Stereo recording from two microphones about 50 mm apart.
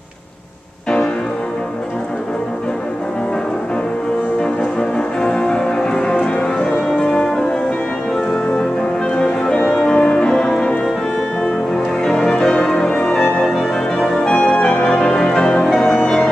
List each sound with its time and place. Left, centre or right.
4.4 s music: centre
9.1 s music: centre
12.0 s music: centre